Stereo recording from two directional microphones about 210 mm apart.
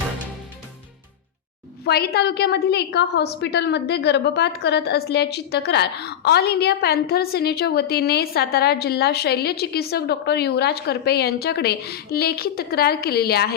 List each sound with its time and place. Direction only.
1.8 s a woman's voice: 50° left (ahead or behind)